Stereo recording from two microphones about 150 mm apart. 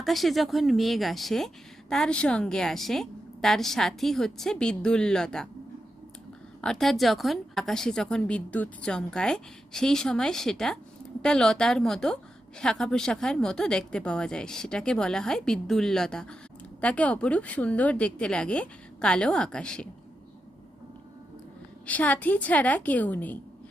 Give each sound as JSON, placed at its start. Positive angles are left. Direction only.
{"t": 0.0, "sound": "a woman's voice", "side_deg": 0}
{"t": 6.6, "sound": "a woman's voice", "side_deg": 5}
{"t": 21.8, "sound": "a woman's voice", "side_deg": 10}